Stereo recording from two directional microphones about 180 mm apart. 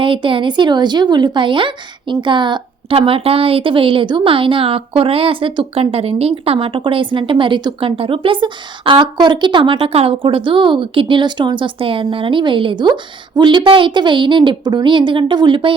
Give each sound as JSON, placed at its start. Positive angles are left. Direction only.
{"t": 0.0, "sound": "speech", "side_deg": -30}